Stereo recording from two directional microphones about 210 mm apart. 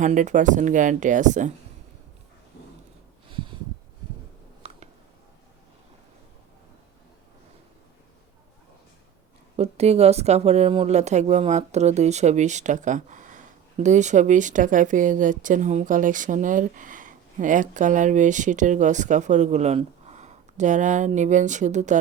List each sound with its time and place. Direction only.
0.0 s speech: 35° right (ahead or behind)
4.6 s a sound: 30° right (ahead or behind)
9.6 s speech: 30° right (ahead or behind)